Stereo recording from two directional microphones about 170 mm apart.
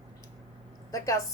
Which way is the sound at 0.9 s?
20° left (ahead or behind).